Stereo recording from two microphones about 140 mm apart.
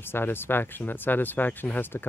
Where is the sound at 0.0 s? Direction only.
15° left (ahead or behind).